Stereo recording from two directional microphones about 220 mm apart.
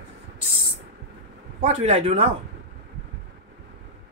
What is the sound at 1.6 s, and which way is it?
Speech, 35° right (ahead or behind).